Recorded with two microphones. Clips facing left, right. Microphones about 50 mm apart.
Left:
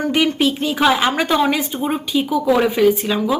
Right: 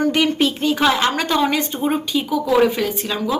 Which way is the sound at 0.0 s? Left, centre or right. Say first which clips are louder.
Even; centre.